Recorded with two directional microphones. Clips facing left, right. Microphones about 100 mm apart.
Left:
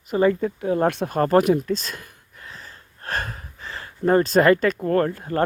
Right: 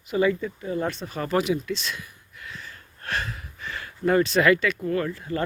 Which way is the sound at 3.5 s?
30° left (ahead or behind).